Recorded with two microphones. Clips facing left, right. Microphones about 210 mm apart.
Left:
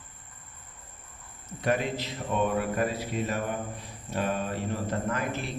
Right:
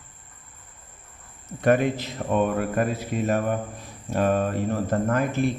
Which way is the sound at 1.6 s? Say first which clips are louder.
Right 7 dB; 55° right (ahead or behind).